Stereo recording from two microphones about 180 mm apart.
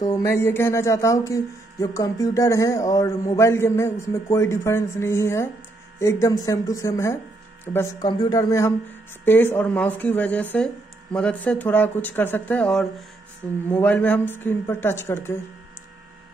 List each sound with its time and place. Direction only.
0.0 s speech: 20° left (ahead or behind)